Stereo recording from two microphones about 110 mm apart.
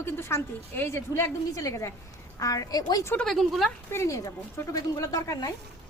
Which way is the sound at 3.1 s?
Centre (ahead or behind).